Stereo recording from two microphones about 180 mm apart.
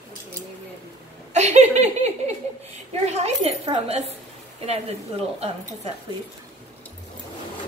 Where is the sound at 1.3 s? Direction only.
40° right (ahead or behind).